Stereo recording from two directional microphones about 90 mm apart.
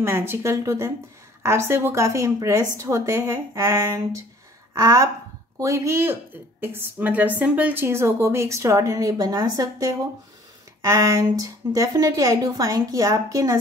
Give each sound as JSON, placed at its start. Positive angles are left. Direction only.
{"t": 0.0, "sound": "a woman's voice", "side_deg": -25}